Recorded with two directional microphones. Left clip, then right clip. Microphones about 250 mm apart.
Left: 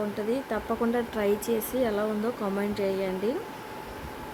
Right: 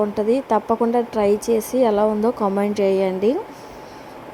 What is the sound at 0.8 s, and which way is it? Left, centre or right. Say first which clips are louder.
Speech: right 9 dB; centre.